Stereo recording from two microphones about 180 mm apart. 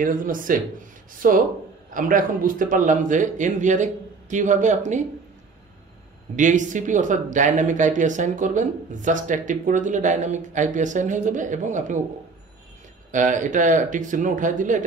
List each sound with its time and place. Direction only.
0.0 s speech: 50° right (ahead or behind)
6.3 s speech: 45° right (ahead or behind)
13.1 s speech: 45° right (ahead or behind)